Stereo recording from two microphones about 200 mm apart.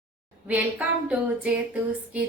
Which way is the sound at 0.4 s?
5° right (ahead or behind).